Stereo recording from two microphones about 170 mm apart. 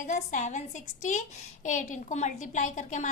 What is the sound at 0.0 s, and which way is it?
A woman's voice, 50° left (ahead or behind).